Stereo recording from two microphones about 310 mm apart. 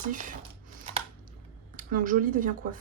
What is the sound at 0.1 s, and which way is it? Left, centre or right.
Speech, right.